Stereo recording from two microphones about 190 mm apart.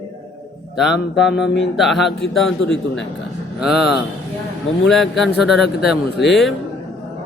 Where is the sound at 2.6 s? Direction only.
90° left.